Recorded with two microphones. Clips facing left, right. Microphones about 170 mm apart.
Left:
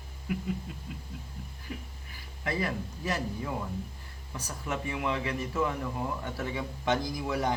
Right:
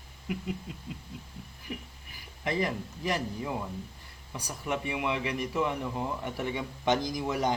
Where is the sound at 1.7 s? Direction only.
25° right (ahead or behind).